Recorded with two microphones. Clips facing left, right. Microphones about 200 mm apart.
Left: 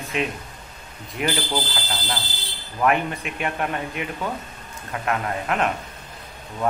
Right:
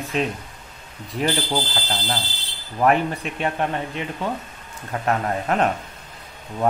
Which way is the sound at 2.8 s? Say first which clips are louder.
Right 2 dB; 35° right (ahead or behind).